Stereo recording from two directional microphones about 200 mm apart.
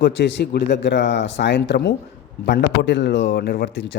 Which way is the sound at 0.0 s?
60° left (ahead or behind).